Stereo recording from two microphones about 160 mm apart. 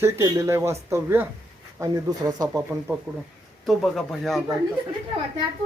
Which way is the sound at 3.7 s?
Centre (ahead or behind).